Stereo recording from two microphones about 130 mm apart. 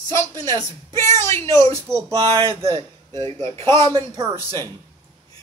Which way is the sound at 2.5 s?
40° right (ahead or behind).